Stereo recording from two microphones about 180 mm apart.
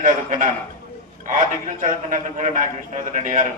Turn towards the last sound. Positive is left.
turn(degrees=-45)  # may be behind; listen again after turning